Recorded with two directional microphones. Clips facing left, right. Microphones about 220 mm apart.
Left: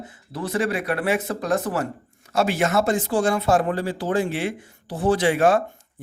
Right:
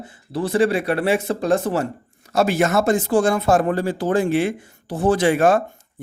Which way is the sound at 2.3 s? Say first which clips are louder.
Right 3 dB; 40° right (ahead or behind).